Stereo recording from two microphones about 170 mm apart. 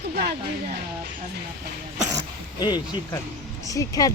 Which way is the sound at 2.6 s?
25° left (ahead or behind).